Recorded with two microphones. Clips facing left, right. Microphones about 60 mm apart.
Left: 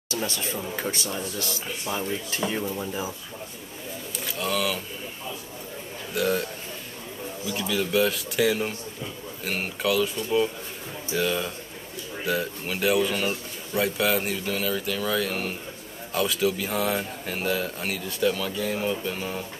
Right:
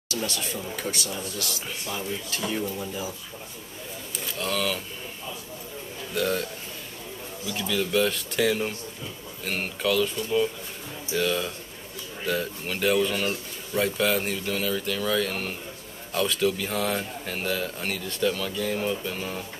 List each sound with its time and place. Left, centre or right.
0.1 s speech: left
1.9 s speech: centre
4.3 s speech: centre
6.1 s speech: centre
7.5 s speech: centre
11.1 s speech: centre